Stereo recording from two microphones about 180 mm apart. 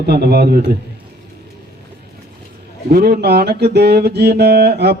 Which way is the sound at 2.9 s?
60° right (ahead or behind).